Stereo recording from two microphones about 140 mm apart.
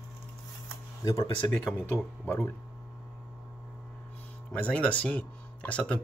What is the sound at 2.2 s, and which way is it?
Speech, 15° left (ahead or behind).